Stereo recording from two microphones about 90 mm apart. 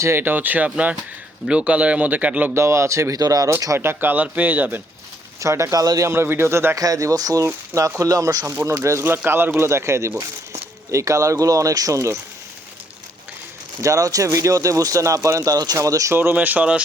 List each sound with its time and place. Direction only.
0.0 s speech: 25° right (ahead or behind)
2.5 s speech: 30° right (ahead or behind)
3.8 s speech: 25° right (ahead or behind)
5.4 s speech: 35° right (ahead or behind)
6.1 s speech: 25° right (ahead or behind)
6.7 s speech: 40° right (ahead or behind)
8.4 s speech: 30° right (ahead or behind)
13.8 s speech: 40° right (ahead or behind)
16.1 s speech: 20° right (ahead or behind)